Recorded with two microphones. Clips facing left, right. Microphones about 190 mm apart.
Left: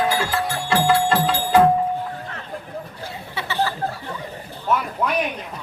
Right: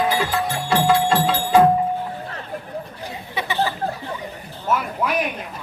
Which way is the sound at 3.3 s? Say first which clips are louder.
Right 1 dB; 15° right (ahead or behind).